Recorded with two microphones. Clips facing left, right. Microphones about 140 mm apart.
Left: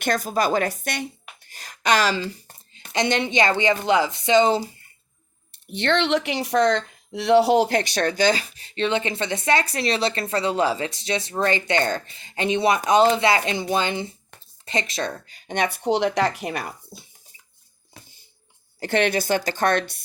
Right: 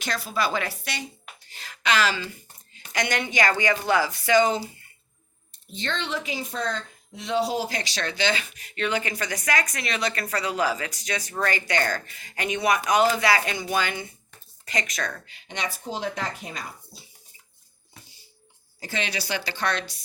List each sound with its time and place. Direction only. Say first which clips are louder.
0.0 s a woman's voice: left 5 dB; 50° left (ahead or behind)
2.9 s speech: left 5 dB; 25° left (ahead or behind)
5.5 s speech: left 9 dB; 65° left (ahead or behind); by 15.4 s 30° left (ahead or behind)
15.4 s speech: left 9 dB; 55° left (ahead or behind)
18.8 s a woman's voice: left 10 dB; 65° left (ahead or behind)